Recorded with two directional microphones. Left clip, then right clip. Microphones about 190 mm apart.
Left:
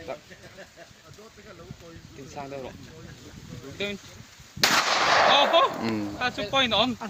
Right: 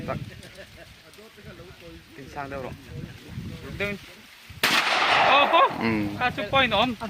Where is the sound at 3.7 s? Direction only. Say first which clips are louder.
Right 2 dB; 40° right (ahead or behind).